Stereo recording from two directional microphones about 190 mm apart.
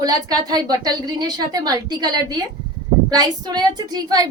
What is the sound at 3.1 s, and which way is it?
A woman's voice, 20° right (ahead or behind).